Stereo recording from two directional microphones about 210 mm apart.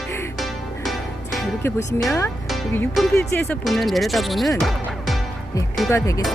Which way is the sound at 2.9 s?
Centre (ahead or behind).